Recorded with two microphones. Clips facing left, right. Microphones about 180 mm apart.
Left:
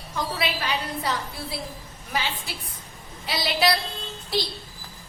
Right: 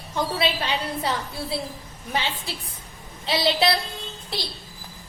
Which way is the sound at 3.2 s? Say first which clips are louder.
Right 2 dB; 25° right (ahead or behind).